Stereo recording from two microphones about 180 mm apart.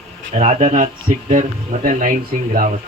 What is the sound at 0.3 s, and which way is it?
Speech, 40° right (ahead or behind).